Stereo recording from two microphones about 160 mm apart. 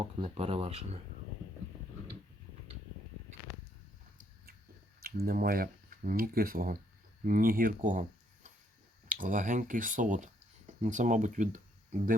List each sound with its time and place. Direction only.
0.2 s speech: 40° right (ahead or behind)
4.9 s speech: 70° right (ahead or behind)
9.0 s speech: 60° right (ahead or behind)